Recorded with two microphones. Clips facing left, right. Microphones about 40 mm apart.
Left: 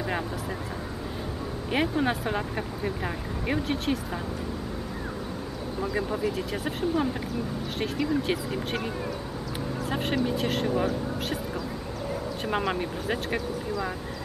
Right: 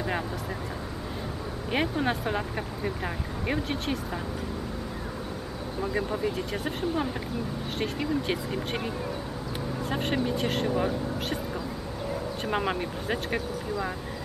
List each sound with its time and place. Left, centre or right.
1.7 s speech: centre
5.8 s speech: centre
12.4 s speech: centre